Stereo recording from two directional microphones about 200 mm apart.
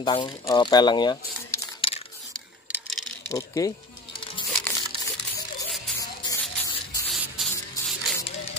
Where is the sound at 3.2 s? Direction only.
15° left (ahead or behind).